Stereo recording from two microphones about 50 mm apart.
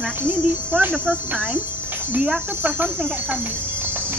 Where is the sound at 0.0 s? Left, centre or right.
Right.